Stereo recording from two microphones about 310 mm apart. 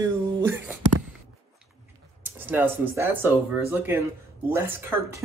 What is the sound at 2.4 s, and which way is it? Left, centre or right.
Speech, centre.